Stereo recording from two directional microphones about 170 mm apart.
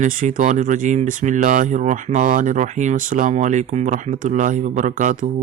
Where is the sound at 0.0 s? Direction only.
50° right (ahead or behind).